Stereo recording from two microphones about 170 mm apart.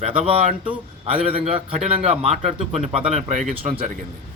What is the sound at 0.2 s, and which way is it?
A man's voice, 35° right (ahead or behind).